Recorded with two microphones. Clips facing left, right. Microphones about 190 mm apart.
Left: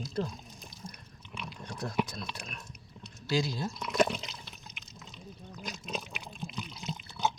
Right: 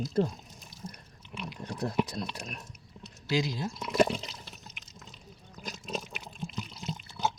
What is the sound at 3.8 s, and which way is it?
Speech, 5° right (ahead or behind).